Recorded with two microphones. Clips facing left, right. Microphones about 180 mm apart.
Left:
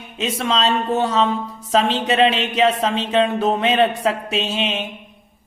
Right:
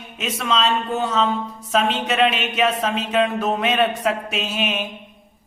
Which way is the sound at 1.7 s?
30° left (ahead or behind).